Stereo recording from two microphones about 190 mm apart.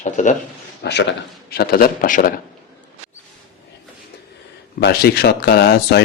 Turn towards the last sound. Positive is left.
turn(degrees=60)  # may be behind; listen again after turning